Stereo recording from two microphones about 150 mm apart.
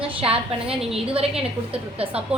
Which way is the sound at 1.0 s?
40° right (ahead or behind).